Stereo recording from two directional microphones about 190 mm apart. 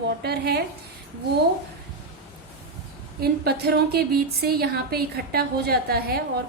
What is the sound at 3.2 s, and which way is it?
A woman's voice, 55° right (ahead or behind).